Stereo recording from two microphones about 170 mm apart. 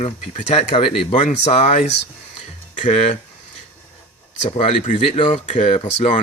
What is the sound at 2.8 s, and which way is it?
Speech, 40° left (ahead or behind).